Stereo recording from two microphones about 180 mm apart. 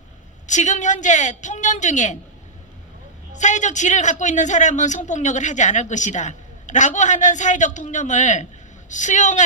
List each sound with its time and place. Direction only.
0.4 s a man's voice: 40° left (ahead or behind)
3.3 s a man's voice: 40° left (ahead or behind)